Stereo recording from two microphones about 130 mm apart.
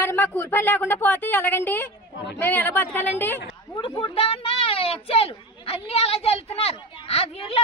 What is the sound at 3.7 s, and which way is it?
A child's voice, 35° left (ahead or behind).